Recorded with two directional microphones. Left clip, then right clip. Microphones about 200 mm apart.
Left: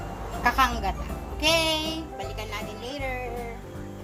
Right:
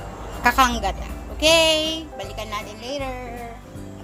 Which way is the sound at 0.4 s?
45° right (ahead or behind).